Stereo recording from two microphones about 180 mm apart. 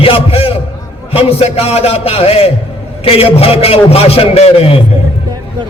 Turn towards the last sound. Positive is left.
turn(degrees=35)  # may be behind; listen again after turning